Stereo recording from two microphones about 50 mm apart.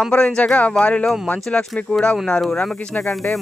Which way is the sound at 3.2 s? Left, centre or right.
Left.